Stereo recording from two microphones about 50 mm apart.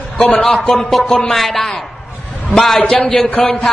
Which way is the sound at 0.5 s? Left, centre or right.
Centre.